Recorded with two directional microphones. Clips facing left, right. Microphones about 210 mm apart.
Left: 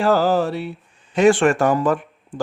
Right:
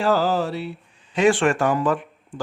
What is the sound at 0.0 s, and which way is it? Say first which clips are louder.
Speech: left 3 dB; 50° left (ahead or behind).